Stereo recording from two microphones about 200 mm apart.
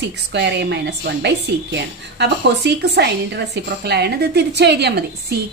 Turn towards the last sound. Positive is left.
turn(degrees=-55)  # may be behind; listen again after turning